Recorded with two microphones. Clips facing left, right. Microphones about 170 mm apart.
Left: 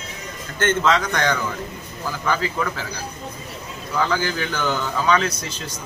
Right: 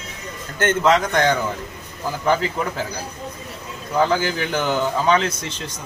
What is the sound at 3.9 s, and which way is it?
A man's voice, 20° right (ahead or behind).